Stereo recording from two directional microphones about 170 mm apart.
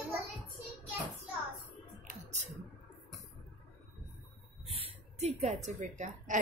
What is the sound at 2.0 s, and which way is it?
Music, 45° right (ahead or behind).